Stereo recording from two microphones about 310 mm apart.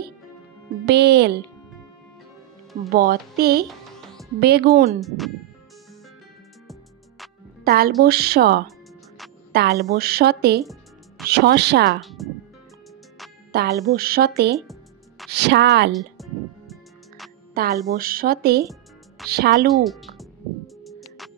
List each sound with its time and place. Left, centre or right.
0.8 s a woman's voice: right
2.9 s speech: right
3.6 s music: centre
4.4 s a woman's voice: right
5.0 s speech: centre
7.6 s a woman's voice: right
10.6 s music: centre
11.2 s a woman's voice: right
12.0 s music: centre
13.5 s a woman's voice: right
15.9 s music: centre
17.8 s a woman's voice: right
19.7 s music: centre